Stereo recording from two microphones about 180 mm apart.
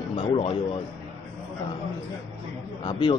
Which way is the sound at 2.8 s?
30° left (ahead or behind).